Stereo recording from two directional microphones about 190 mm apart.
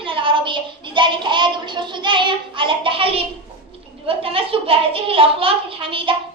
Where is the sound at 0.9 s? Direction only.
25° right (ahead or behind).